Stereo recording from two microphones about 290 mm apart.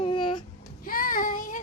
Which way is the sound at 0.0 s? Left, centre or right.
Centre.